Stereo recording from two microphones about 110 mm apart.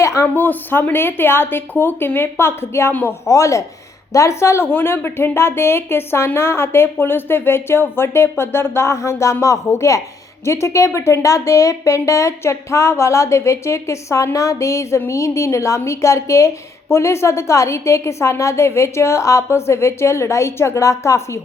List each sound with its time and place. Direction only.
0.0 s speech: 25° left (ahead or behind)